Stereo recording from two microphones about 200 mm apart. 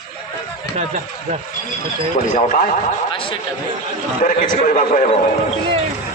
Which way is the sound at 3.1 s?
25° left (ahead or behind).